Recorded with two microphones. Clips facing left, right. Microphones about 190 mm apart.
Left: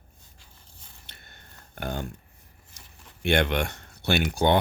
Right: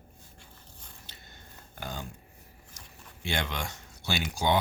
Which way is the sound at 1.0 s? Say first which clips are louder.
Right 1 dB; 60° left (ahead or behind).